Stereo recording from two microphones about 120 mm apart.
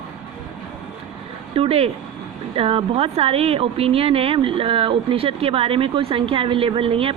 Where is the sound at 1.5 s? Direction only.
50° right (ahead or behind).